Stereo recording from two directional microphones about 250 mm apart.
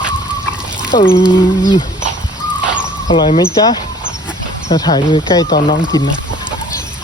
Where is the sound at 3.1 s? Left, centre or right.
Centre.